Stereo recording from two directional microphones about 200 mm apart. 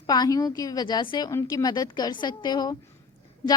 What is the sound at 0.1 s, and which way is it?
Speech, 20° left (ahead or behind).